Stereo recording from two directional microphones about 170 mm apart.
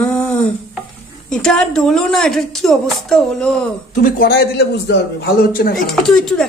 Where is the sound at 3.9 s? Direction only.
55° left (ahead or behind).